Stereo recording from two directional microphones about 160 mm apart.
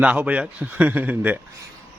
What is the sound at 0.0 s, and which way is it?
A man's voice, 10° right (ahead or behind).